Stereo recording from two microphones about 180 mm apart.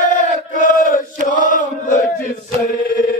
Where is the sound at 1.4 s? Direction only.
45° left (ahead or behind).